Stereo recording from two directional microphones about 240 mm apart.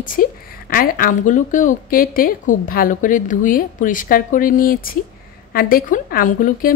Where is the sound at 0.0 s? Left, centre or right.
Left.